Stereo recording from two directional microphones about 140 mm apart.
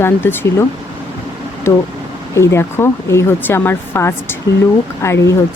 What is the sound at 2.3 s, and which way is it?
Speech, 20° left (ahead or behind).